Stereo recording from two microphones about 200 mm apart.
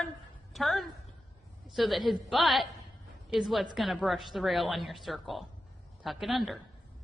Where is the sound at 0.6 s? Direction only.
Centre (ahead or behind).